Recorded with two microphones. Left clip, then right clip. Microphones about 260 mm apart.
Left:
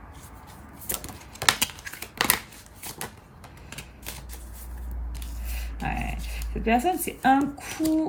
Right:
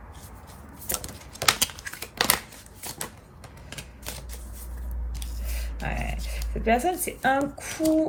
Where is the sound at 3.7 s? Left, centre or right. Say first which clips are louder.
Right 1 dB; centre.